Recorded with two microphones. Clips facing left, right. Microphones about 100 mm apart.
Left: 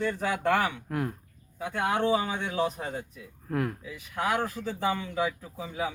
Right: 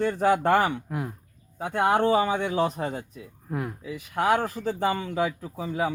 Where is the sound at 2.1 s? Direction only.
75° right (ahead or behind); by 3.2 s 55° right (ahead or behind).